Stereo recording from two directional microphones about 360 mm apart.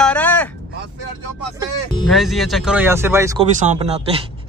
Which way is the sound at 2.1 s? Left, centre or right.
Centre.